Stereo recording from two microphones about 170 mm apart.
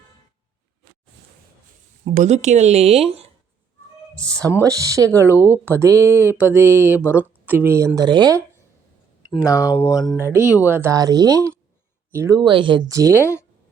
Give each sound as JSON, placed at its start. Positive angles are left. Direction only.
{"t": 2.1, "sound": "speech", "side_deg": -45}
{"t": 4.1, "sound": "speech", "side_deg": 5}
{"t": 4.6, "sound": "speech", "side_deg": -20}
{"t": 9.4, "sound": "speech", "side_deg": 20}
{"t": 10.7, "sound": "speech", "side_deg": -15}
{"t": 13.1, "sound": "speech", "side_deg": 15}